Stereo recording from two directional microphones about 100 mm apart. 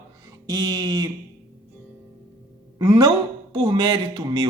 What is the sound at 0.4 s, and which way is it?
Speech, 40° right (ahead or behind).